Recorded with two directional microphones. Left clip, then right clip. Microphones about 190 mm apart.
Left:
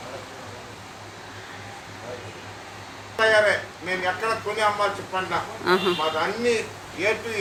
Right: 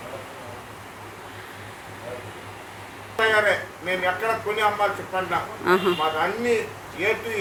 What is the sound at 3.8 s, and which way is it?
A man's voice, centre (ahead or behind).